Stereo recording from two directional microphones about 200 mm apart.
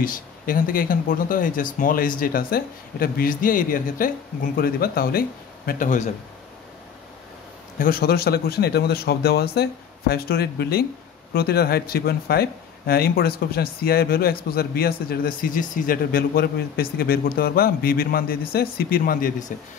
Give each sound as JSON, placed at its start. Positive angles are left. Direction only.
{"t": 0.0, "sound": "a man's voice", "side_deg": 45}
{"t": 7.8, "sound": "speech", "side_deg": 50}